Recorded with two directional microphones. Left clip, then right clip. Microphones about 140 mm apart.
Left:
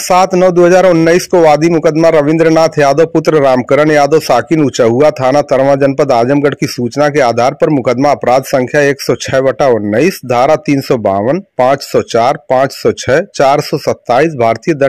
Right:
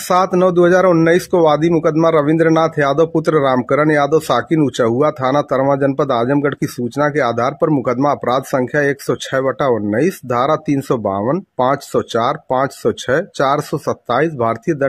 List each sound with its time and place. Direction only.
0.1 s speech: 15° left (ahead or behind)